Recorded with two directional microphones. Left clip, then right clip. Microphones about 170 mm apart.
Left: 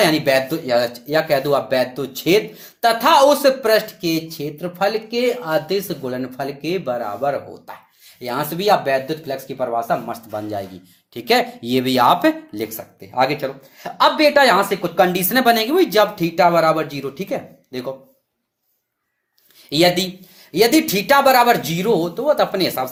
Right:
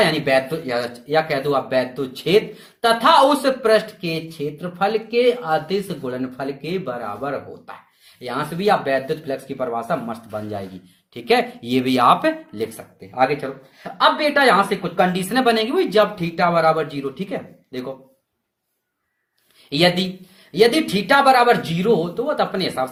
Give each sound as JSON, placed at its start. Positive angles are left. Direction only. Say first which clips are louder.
{"t": 0.0, "sound": "speech", "louder": "left 2 dB", "side_deg": 35}
{"t": 19.7, "sound": "speech", "louder": "left 2 dB", "side_deg": 35}